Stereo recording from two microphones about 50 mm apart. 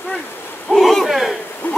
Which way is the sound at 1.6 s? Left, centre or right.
Left.